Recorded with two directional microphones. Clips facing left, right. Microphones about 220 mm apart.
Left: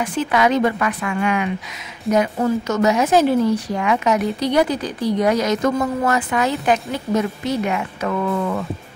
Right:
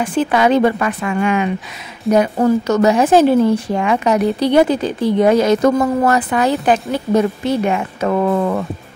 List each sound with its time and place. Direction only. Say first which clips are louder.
0.0 s speech: right 4 dB; 30° right (ahead or behind)